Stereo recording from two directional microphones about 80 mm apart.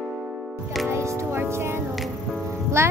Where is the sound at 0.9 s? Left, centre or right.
Right.